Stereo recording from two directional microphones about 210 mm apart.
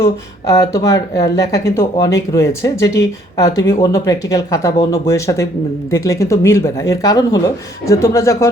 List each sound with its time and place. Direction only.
0.0 s speech: 15° left (ahead or behind)